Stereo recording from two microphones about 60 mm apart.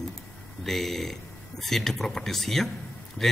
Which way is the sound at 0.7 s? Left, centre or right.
Centre.